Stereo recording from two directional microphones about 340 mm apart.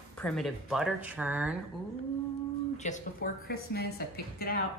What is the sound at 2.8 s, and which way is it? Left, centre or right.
Speech, left.